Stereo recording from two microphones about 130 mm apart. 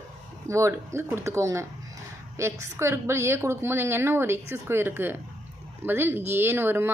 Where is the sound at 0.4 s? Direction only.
20° right (ahead or behind).